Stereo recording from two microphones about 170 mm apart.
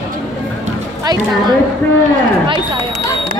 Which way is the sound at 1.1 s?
25° right (ahead or behind).